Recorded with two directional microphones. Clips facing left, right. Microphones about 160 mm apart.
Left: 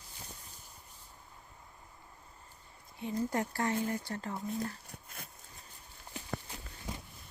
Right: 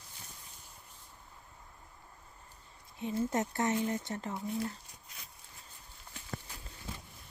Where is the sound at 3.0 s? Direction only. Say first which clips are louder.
Right 1 dB; 20° right (ahead or behind).